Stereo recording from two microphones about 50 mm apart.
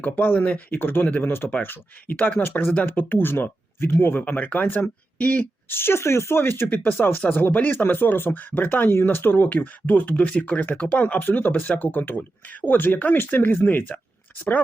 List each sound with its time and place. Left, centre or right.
0.0 s speech: left
0.7 s speech: left
2.0 s speech: left
2.4 s speech: left
4.3 s speech: left
5.6 s speech: left
6.7 s speech: left